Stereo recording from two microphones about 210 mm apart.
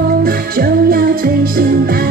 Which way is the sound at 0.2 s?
45° right (ahead or behind).